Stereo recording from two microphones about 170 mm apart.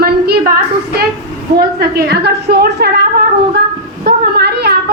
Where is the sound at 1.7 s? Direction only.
70° right (ahead or behind).